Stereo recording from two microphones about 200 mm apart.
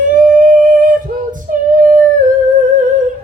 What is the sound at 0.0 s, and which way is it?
Female singing, 40° right (ahead or behind).